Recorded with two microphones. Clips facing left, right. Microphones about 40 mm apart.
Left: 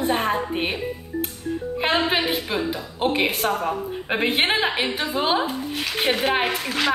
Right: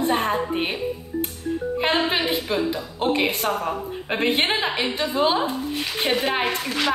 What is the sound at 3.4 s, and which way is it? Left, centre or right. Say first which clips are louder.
Speech: left 1 dB; centre.